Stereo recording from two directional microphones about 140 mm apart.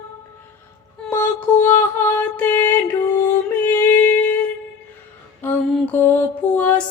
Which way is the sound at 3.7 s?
15° left (ahead or behind).